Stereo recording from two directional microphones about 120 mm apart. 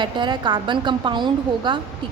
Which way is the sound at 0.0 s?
40° right (ahead or behind).